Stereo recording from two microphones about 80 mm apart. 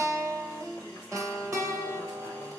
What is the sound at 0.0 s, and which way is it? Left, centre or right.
Music, right.